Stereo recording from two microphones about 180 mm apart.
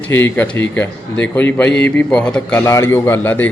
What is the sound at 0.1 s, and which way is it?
A man's voice, 10° left (ahead or behind).